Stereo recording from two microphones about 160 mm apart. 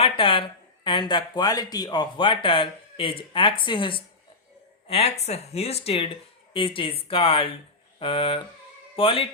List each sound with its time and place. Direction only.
0.0 s speech: 35° left (ahead or behind)